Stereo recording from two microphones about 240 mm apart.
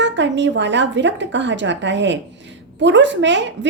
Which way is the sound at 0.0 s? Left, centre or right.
Right.